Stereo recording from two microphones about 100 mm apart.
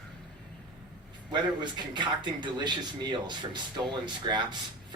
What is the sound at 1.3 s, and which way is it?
Speech, 50° right (ahead or behind).